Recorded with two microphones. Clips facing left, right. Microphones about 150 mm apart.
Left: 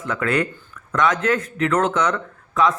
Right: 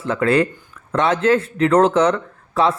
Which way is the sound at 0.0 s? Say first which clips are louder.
Right 5 dB; 30° right (ahead or behind).